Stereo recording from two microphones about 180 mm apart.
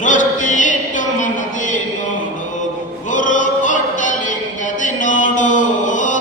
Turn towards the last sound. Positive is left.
turn(degrees=45)  # may be behind; listen again after turning